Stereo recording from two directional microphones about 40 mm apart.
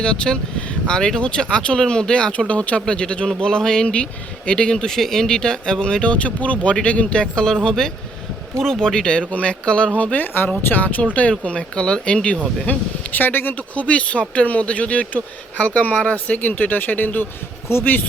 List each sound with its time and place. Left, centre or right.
0.0 s speech: centre
2.5 s speech: left
3.2 s speech: centre
3.8 s speech: left
4.9 s speech: centre; by 12.4 s left
12.6 s speech: left
13.6 s speech: left
17.7 s speech: left